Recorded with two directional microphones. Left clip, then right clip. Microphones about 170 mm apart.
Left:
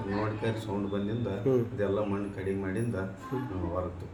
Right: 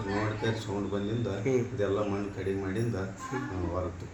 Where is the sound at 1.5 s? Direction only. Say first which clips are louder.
Left 2 dB; 40° left (ahead or behind).